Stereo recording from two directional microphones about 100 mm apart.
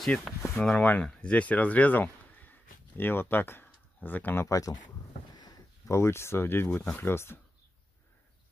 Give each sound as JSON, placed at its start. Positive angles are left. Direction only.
{"t": 0.0, "sound": "speech", "side_deg": 0}
{"t": 0.6, "sound": "speech", "side_deg": 15}
{"t": 4.5, "sound": "speech", "side_deg": 35}
{"t": 5.9, "sound": "speech", "side_deg": 25}